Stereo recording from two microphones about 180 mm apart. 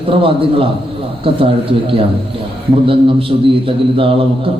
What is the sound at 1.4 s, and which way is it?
Mantra, 30° right (ahead or behind).